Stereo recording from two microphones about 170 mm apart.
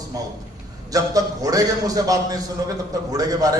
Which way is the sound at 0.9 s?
20° right (ahead or behind).